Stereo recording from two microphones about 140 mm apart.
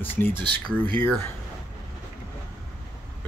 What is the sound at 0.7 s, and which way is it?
Speech, 15° left (ahead or behind).